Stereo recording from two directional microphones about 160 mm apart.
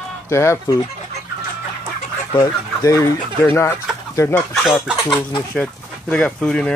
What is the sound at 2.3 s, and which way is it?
Speech, 25° left (ahead or behind).